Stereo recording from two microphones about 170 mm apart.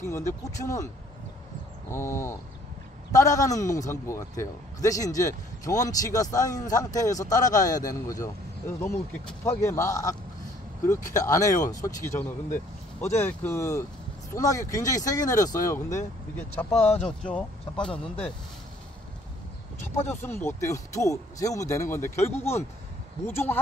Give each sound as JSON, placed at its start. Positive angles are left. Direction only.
{"t": 0.0, "sound": "speech", "side_deg": 15}
{"t": 1.9, "sound": "a man's voice", "side_deg": 15}
{"t": 20.2, "sound": "speech", "side_deg": 15}